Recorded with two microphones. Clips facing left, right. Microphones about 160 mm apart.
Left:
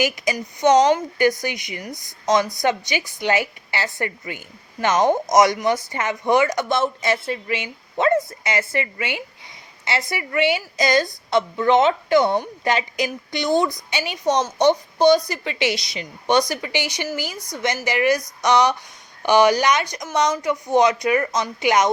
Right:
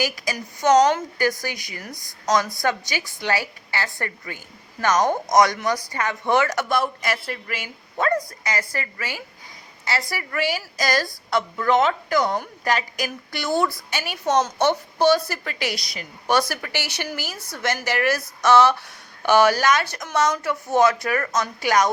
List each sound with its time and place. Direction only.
0.0 s a woman's voice: 20° left (ahead or behind)
15.7 s a woman's voice: centre (ahead or behind)
16.2 s speech: 20° left (ahead or behind)